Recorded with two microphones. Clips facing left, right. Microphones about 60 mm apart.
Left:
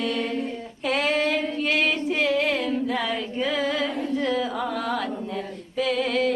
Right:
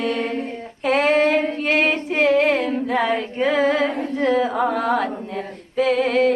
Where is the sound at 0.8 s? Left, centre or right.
Right.